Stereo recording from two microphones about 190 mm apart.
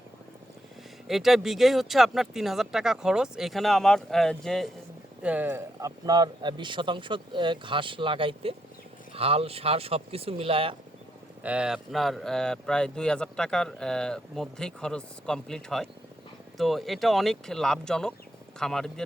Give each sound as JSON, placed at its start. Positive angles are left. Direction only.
{"t": 1.0, "sound": "speech", "side_deg": 0}
{"t": 11.4, "sound": "speech", "side_deg": -5}